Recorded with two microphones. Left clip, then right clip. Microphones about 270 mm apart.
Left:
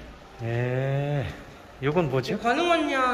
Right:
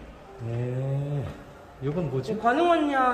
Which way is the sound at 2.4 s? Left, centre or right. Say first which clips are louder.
Right 2 dB; right.